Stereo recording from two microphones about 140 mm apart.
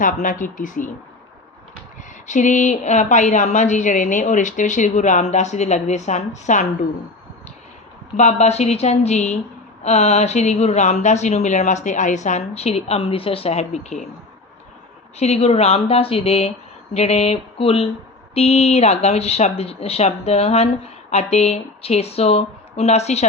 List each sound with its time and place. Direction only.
0.0 s speech: 70° left (ahead or behind)
2.2 s a woman's voice: 60° left (ahead or behind)
8.1 s speech: 55° left (ahead or behind)
15.2 s speech: 50° left (ahead or behind)